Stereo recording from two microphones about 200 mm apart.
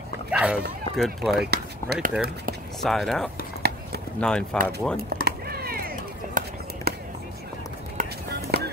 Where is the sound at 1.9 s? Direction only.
55° right (ahead or behind).